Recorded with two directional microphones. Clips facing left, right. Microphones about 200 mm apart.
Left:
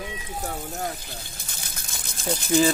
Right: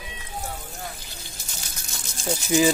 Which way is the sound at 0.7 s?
45° left (ahead or behind).